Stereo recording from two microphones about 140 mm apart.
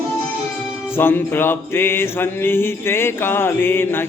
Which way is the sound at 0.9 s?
15° left (ahead or behind).